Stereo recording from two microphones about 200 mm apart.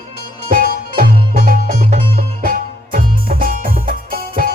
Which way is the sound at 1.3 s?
45° right (ahead or behind).